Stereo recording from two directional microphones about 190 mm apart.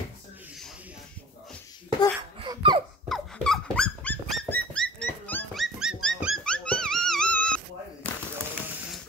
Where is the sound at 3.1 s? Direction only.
Centre (ahead or behind).